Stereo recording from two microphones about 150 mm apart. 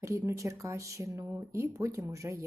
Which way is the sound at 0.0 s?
20° right (ahead or behind).